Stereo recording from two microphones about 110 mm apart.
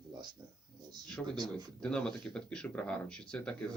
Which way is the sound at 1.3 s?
35° right (ahead or behind).